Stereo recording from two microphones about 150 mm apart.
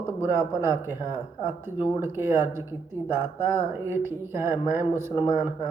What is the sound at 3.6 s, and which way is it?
Speech, 15° right (ahead or behind).